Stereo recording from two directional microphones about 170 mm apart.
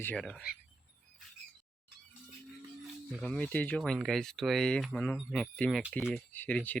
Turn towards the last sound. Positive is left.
turn(degrees=10)  # may be behind; listen again after turning